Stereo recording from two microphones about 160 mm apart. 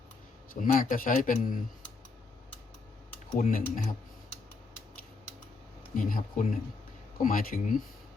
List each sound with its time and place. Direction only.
0.5 s speech: 55° left (ahead or behind)
3.3 s speech: 60° left (ahead or behind)
5.9 s speech: 60° left (ahead or behind)